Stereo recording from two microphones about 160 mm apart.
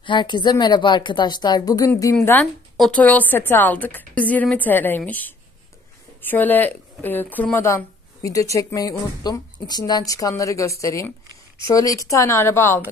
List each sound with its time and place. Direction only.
0.0 s speech: 30° left (ahead or behind)
2.8 s a woman's voice: 10° left (ahead or behind)
6.3 s a woman's voice: 10° left (ahead or behind)